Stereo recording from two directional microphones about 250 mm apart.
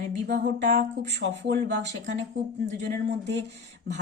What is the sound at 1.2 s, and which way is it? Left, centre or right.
Speech, right.